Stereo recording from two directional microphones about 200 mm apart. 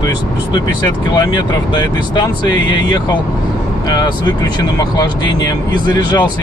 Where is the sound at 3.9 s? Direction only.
20° left (ahead or behind).